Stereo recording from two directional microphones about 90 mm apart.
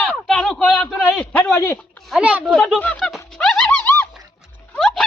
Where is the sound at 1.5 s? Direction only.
30° left (ahead or behind).